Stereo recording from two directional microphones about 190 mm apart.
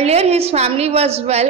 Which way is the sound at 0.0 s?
35° right (ahead or behind).